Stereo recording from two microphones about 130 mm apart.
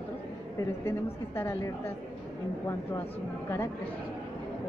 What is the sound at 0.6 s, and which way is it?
A woman's voice, 20° left (ahead or behind).